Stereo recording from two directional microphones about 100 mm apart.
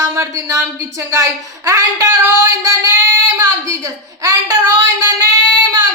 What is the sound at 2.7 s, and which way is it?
Female singing, 30° right (ahead or behind).